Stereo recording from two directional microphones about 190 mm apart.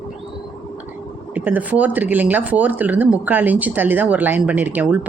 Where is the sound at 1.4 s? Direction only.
10° right (ahead or behind).